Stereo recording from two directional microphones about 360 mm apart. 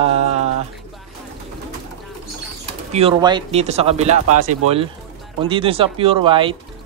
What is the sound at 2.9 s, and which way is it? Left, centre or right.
Speech, centre.